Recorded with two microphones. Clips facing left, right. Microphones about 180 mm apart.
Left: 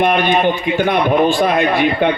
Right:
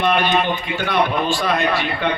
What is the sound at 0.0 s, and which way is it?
A man's voice, 50° left (ahead or behind).